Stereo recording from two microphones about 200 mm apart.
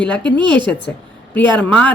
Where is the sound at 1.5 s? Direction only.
5° left (ahead or behind).